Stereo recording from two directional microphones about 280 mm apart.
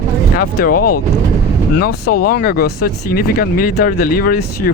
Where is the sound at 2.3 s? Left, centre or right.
Left.